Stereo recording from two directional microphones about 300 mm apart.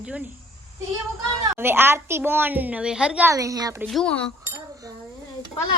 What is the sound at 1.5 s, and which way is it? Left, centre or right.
A child's voice, centre.